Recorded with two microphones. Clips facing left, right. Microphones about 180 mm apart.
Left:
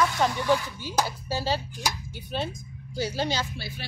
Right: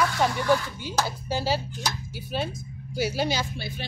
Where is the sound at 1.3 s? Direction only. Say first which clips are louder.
Right 2 dB; 10° right (ahead or behind).